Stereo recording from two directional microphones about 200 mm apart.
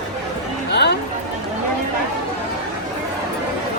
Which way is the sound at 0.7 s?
55° left (ahead or behind).